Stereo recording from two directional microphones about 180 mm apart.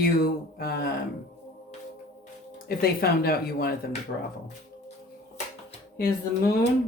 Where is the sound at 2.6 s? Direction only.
55° left (ahead or behind).